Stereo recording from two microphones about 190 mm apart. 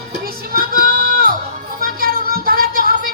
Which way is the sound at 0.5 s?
50° right (ahead or behind).